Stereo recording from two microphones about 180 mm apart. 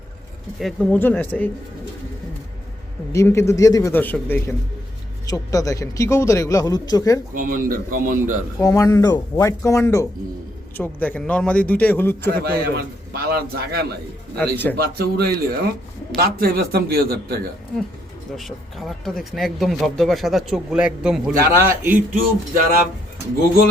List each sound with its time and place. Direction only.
0.6 s a man's voice: 10° left (ahead or behind)
3.1 s a man's voice: 15° left (ahead or behind)
7.3 s a man's voice: 50° right (ahead or behind)
8.5 s a man's voice: 20° left (ahead or behind)
12.4 s a man's voice: 60° right (ahead or behind)
14.3 s a man's voice: 10° left (ahead or behind)
14.8 s a man's voice: 60° right (ahead or behind)
18.3 s speech: centre (ahead or behind)
22.1 s a man's voice: 50° right (ahead or behind)